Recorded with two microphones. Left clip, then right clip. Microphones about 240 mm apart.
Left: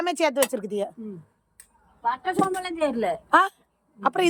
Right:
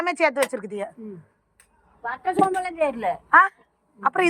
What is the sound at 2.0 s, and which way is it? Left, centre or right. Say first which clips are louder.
A woman's voice: right 2 dB; left.